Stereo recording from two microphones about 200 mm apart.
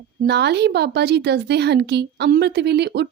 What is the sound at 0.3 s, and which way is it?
A woman's voice, 55° right (ahead or behind).